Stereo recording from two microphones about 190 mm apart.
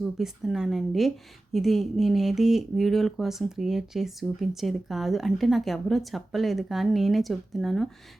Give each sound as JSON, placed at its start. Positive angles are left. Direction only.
{"t": 0.0, "sound": "speech", "side_deg": 0}